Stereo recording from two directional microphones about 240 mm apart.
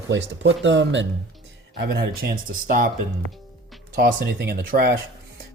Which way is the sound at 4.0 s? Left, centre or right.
Right.